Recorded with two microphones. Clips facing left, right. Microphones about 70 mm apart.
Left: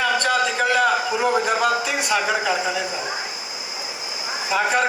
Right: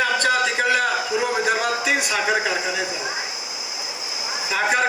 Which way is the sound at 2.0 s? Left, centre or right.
Left.